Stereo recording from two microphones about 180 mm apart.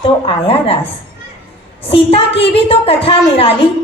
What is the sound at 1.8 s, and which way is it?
A woman's voice, 30° left (ahead or behind).